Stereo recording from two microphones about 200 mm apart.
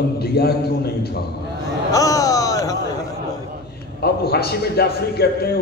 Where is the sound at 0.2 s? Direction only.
50° left (ahead or behind).